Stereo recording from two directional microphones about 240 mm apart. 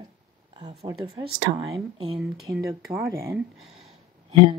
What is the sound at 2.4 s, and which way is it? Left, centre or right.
Speech, centre.